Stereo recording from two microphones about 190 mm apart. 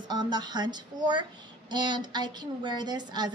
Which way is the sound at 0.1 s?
20° right (ahead or behind).